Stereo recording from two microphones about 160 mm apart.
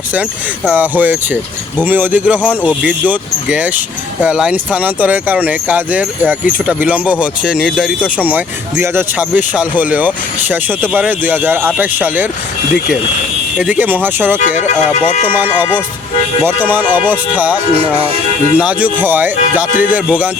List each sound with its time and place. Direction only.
0.1 s speech: 10° right (ahead or behind)
13.6 s speech: 10° right (ahead or behind)
14.3 s speech: 50° left (ahead or behind)
17.3 s speech: 10° right (ahead or behind)
19.7 s music: 60° left (ahead or behind)
20.1 s speech: 10° right (ahead or behind)